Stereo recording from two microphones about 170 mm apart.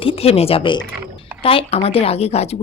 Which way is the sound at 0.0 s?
35° left (ahead or behind).